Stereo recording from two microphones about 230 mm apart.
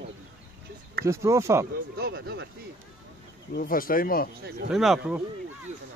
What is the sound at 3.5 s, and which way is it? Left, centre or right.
Speech, left.